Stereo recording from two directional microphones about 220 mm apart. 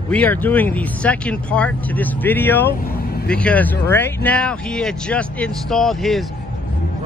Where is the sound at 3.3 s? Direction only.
5° left (ahead or behind).